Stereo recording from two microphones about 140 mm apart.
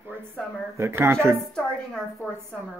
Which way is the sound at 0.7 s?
20° right (ahead or behind).